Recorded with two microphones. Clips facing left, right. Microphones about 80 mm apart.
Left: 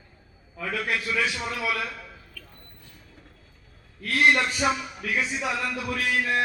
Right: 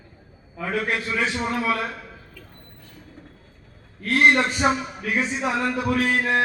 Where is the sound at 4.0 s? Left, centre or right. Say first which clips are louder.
Right 3 dB; right.